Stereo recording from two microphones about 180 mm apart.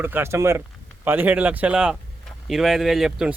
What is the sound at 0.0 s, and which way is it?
Speech, 15° right (ahead or behind).